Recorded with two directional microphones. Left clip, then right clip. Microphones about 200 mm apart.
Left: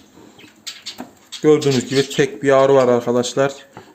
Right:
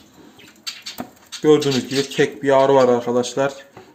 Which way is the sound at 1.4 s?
10° left (ahead or behind).